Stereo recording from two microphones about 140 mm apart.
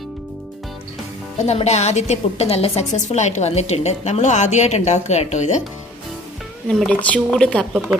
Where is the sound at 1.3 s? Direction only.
50° left (ahead or behind).